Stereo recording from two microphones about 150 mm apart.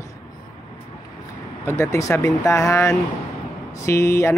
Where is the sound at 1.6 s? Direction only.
15° left (ahead or behind).